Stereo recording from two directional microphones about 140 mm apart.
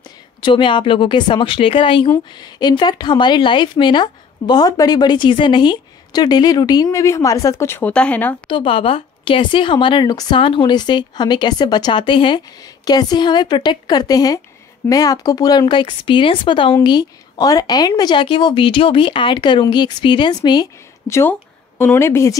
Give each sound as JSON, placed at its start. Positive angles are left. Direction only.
{"t": 0.4, "sound": "a woman's voice", "side_deg": 35}
{"t": 8.5, "sound": "a woman's voice", "side_deg": 40}
{"t": 21.1, "sound": "speech", "side_deg": 15}